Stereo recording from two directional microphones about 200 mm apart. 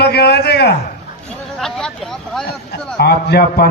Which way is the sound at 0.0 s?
55° left (ahead or behind).